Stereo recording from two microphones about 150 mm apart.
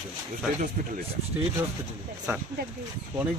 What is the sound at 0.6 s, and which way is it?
Speech, 65° right (ahead or behind).